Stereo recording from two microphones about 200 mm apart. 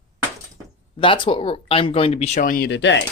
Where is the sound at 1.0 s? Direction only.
25° left (ahead or behind).